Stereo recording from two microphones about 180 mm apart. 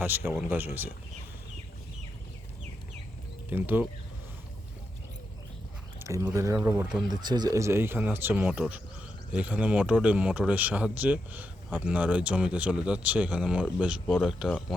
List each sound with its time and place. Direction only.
0.0 s speech: 10° right (ahead or behind)
3.5 s speech: 10° right (ahead or behind)
6.0 s speech: 15° right (ahead or behind)
7.1 s speech: 25° right (ahead or behind); by 14.8 s centre (ahead or behind)